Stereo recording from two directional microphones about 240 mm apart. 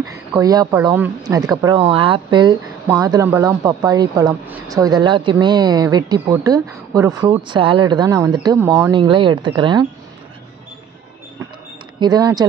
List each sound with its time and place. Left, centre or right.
0.0 s a woman's voice: centre
12.0 s a woman's voice: centre